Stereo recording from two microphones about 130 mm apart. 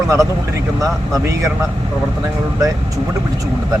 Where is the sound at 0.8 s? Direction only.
25° right (ahead or behind).